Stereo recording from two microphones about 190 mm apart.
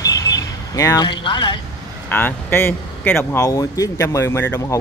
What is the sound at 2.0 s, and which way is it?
Speech, 10° left (ahead or behind).